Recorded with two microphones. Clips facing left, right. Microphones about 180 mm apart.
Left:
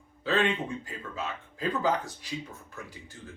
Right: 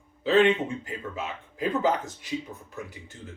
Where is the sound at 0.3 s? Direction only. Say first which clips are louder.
Right 6 dB; 20° right (ahead or behind).